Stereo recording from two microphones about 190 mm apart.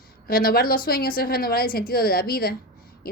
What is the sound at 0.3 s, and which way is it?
A woman's voice, 50° left (ahead or behind).